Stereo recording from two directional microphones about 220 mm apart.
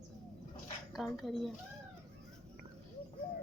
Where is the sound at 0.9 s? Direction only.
Centre (ahead or behind).